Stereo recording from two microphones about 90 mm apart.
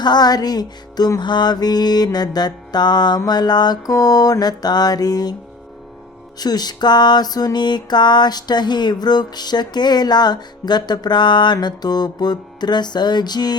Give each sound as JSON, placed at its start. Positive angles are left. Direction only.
{"t": 0.0, "sound": "music", "side_deg": 50}
{"t": 6.4, "sound": "music", "side_deg": 50}